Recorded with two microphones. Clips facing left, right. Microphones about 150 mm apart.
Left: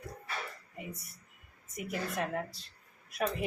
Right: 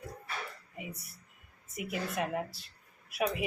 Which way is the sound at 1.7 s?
5° right (ahead or behind).